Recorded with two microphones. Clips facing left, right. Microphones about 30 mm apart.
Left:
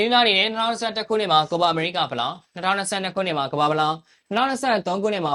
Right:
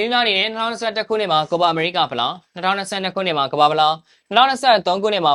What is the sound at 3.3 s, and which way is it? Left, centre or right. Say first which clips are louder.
Speech: right 8 dB; right.